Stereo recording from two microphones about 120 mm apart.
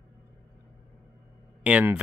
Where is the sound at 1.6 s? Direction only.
10° right (ahead or behind).